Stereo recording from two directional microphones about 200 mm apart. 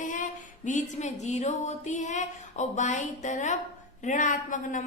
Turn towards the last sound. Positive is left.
turn(degrees=40)  # may be behind; listen again after turning